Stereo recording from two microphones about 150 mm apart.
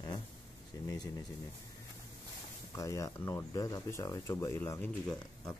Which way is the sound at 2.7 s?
20° left (ahead or behind).